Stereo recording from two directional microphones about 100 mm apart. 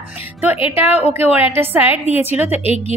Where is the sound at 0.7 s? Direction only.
20° right (ahead or behind).